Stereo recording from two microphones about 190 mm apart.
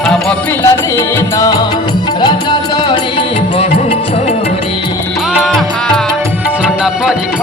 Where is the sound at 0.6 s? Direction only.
15° left (ahead or behind).